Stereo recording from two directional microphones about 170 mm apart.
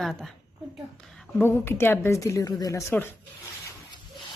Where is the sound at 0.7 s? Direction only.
Centre (ahead or behind).